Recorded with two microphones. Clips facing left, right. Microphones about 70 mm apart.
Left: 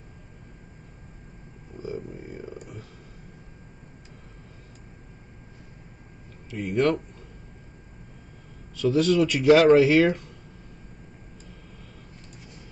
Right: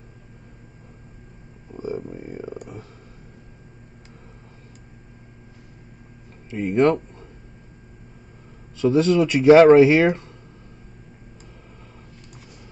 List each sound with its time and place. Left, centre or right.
1.8 s a sound: right
6.5 s speech: right
8.7 s speech: right